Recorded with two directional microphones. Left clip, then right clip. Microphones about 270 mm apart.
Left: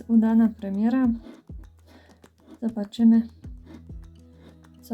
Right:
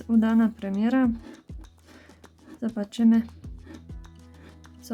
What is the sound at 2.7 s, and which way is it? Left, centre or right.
Speech, centre.